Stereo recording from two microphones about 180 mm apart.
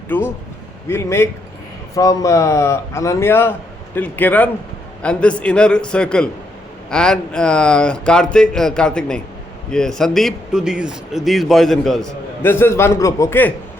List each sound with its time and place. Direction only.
0.1 s a man's voice: 10° left (ahead or behind)
12.4 s a man's voice: 10° left (ahead or behind)